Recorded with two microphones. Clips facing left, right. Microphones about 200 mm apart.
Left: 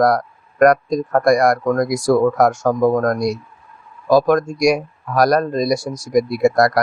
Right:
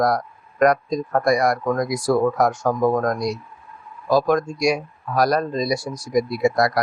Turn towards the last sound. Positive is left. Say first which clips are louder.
# left 4 dB
turn(degrees=45)  # may be behind; listen again after turning